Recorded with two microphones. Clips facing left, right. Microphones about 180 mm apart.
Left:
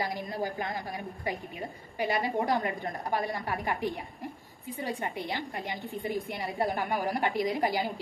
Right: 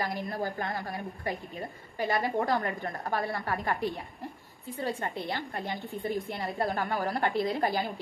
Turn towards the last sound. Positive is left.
turn(degrees=15)  # may be behind; listen again after turning